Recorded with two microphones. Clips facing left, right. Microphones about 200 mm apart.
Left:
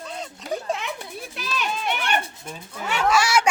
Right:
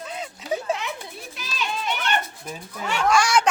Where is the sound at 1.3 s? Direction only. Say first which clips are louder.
Left 2 dB; 55° left (ahead or behind).